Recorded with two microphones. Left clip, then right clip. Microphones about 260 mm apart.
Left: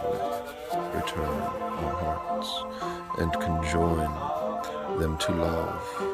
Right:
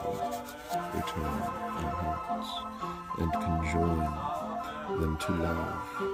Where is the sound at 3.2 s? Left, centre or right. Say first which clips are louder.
Left 4 dB; left.